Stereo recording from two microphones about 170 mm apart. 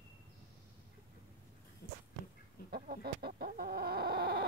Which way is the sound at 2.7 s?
65° right (ahead or behind).